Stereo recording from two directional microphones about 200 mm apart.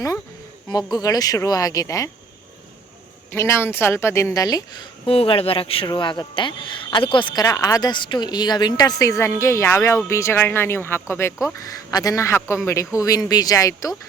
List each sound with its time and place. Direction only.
0.7 s speech: 20° left (ahead or behind)
3.3 s a woman's voice: 10° left (ahead or behind)